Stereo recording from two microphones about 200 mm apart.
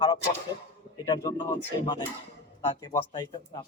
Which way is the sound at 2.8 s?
20° left (ahead or behind).